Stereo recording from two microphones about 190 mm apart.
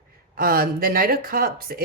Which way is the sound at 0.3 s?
50° right (ahead or behind).